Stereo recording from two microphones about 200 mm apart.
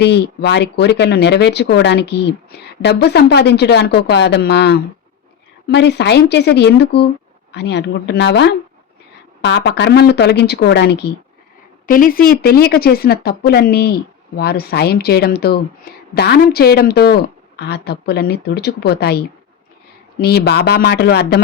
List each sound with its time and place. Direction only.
0.0 s speech: 55° left (ahead or behind)
11.9 s speech: 45° left (ahead or behind)